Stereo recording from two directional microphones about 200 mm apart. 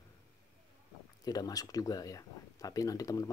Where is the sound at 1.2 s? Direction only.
20° left (ahead or behind).